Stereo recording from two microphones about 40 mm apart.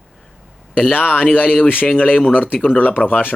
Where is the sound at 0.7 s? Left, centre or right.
Left.